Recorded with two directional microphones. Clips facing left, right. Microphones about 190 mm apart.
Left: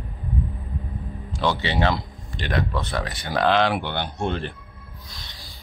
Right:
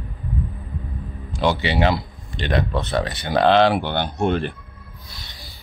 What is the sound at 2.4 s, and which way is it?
Speech, 25° right (ahead or behind).